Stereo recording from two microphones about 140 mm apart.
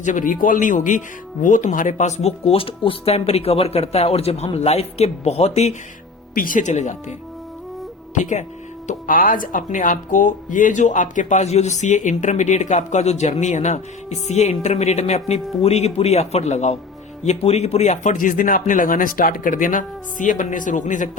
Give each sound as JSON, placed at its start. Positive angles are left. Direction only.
{"t": 0.0, "sound": "speech", "side_deg": 70}
{"t": 6.3, "sound": "speech", "side_deg": 80}
{"t": 8.9, "sound": "speech", "side_deg": 80}